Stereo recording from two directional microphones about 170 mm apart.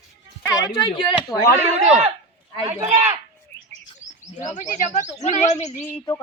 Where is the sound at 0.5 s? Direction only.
25° left (ahead or behind).